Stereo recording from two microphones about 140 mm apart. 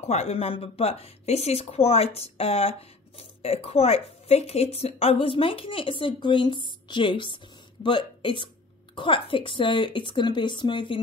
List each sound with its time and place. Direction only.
0.0 s speech: 50° left (ahead or behind); by 11.0 s 35° left (ahead or behind)